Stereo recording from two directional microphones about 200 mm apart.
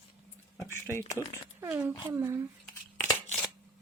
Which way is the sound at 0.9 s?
15° left (ahead or behind).